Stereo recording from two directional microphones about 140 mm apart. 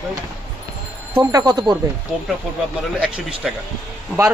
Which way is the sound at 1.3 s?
30° right (ahead or behind).